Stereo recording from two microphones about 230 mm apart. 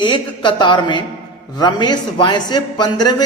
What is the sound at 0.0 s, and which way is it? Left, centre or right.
Speech, centre.